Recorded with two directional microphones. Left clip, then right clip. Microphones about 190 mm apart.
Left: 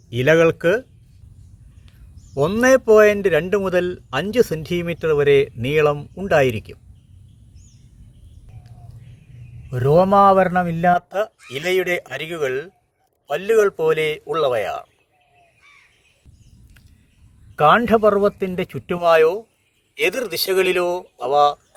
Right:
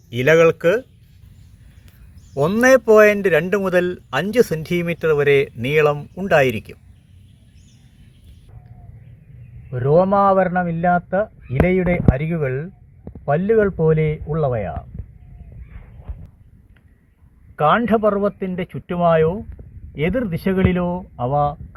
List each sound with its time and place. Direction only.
0.1 s speech: centre (ahead or behind)
2.3 s speech: centre (ahead or behind)
9.6 s speech: 10° left (ahead or behind)
17.6 s speech: 15° left (ahead or behind)